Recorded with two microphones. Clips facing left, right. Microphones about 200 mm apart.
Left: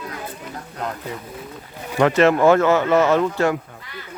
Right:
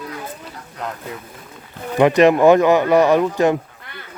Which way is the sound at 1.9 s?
15° right (ahead or behind).